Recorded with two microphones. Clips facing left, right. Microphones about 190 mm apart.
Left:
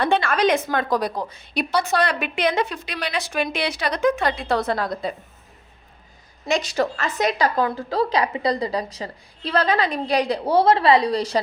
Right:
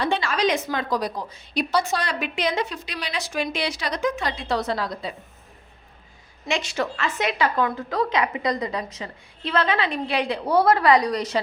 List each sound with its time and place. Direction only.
0.0 s a woman's voice: 55° left (ahead or behind)
6.4 s a woman's voice: 40° left (ahead or behind)